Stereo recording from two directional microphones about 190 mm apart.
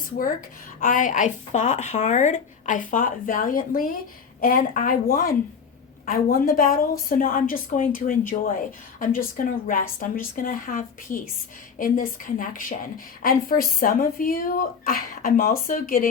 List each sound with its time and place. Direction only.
0.8 s speech: 45° left (ahead or behind)